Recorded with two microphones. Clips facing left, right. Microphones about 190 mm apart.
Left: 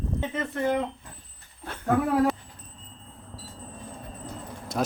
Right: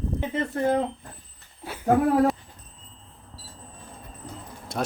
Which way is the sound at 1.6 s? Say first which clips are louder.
Right 2 dB; 5° right (ahead or behind).